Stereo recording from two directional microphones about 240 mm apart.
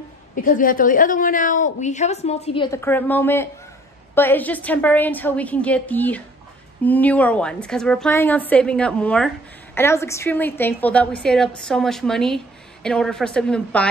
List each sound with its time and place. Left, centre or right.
0.4 s a woman's voice: left; by 13.8 s centre